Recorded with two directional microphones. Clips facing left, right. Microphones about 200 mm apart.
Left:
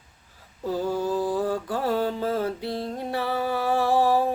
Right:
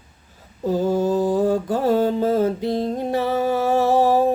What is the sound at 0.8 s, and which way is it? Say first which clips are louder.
Mantra: right 6 dB; 45° right (ahead or behind).